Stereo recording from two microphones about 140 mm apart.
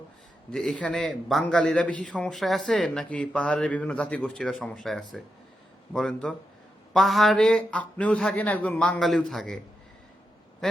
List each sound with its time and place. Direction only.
0.5 s a man's voice: 5° left (ahead or behind)